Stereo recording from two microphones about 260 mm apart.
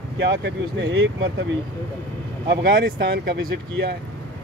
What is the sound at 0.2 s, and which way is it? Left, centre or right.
Speech, right.